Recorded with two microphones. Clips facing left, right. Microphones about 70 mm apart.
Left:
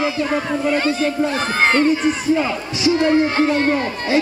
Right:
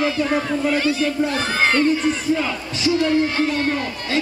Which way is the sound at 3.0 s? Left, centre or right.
Left.